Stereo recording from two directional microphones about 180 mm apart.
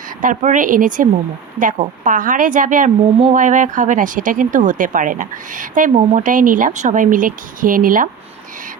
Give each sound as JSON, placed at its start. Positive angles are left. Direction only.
{"t": 0.2, "sound": "a woman's voice", "side_deg": -45}